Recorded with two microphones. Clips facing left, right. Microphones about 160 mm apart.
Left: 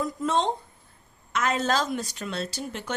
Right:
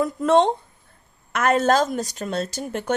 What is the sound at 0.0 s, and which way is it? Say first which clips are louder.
A woman's voice: right 8 dB; 65° right (ahead or behind).